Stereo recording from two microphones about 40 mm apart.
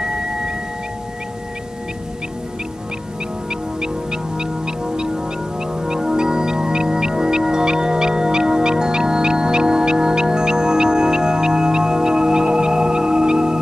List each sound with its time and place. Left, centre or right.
3.4 s music: centre